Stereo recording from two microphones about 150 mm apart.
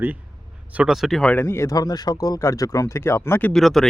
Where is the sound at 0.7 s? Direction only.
5° right (ahead or behind).